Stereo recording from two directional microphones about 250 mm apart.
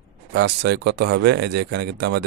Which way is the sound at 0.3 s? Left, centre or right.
Right.